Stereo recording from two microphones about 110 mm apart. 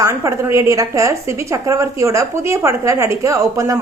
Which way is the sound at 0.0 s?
25° right (ahead or behind).